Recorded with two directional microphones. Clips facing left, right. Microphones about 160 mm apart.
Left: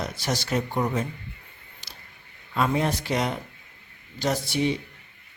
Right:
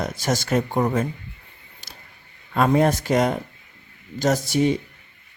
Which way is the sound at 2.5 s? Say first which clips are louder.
Right 6 dB; 50° right (ahead or behind).